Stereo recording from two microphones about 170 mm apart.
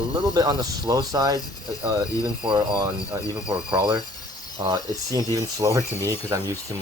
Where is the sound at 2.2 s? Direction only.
5° right (ahead or behind).